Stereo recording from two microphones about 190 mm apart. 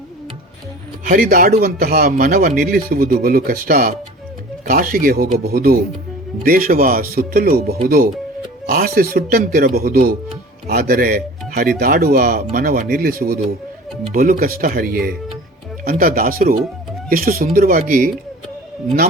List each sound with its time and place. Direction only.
1.0 s speech: 45° right (ahead or behind)